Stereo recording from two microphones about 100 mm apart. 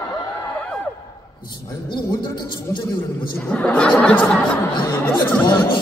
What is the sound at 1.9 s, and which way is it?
Speech, 55° left (ahead or behind).